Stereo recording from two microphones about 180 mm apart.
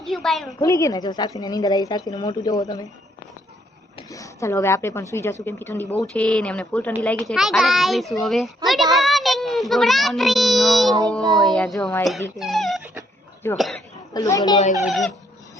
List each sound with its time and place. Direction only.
0.0 s a child's voice: centre (ahead or behind)
0.6 s a woman's voice: 15° left (ahead or behind)
4.1 s a woman's voice: 15° left (ahead or behind); by 8.9 s centre (ahead or behind)
9.0 s child singing: centre (ahead or behind)
11.5 s a child's voice: 5° left (ahead or behind)
12.4 s dog: centre (ahead or behind)
14.1 s a woman's voice: 20° left (ahead or behind)
14.8 s a child's voice: centre (ahead or behind)